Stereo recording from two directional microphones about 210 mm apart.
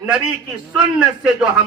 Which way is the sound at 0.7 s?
5° right (ahead or behind).